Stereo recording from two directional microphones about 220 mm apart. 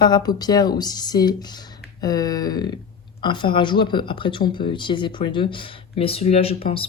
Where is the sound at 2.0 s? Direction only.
20° left (ahead or behind).